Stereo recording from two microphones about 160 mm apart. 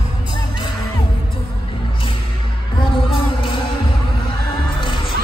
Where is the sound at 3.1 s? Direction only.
30° left (ahead or behind).